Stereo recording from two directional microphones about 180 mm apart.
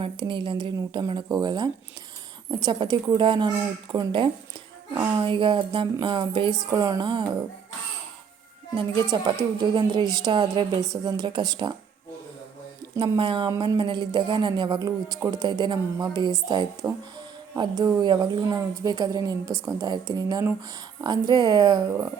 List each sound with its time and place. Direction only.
0.0 s music: 25° right (ahead or behind)
8.7 s music: 25° right (ahead or behind)
13.0 s music: 30° right (ahead or behind)